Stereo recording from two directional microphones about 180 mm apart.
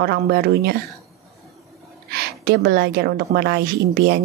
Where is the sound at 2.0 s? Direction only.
65° right (ahead or behind).